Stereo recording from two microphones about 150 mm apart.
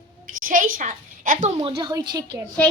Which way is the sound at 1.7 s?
25° right (ahead or behind).